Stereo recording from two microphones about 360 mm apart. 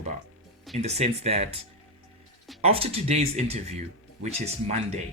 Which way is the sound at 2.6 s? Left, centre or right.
Centre.